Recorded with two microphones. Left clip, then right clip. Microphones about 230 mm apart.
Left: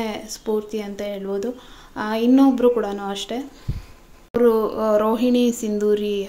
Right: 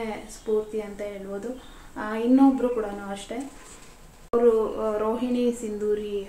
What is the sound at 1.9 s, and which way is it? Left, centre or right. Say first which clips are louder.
Speech: left 4 dB; left.